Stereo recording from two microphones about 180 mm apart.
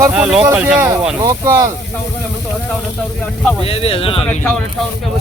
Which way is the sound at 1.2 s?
15° right (ahead or behind).